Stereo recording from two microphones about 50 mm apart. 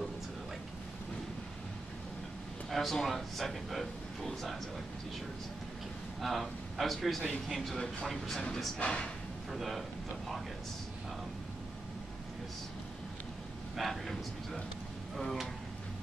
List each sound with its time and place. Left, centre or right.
2.7 s speech: centre
6.2 s speech: centre
8.7 s speech: centre
9.5 s speech: centre
13.7 s speech: centre